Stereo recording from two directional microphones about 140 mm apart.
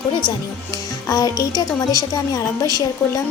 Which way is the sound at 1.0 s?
25° left (ahead or behind).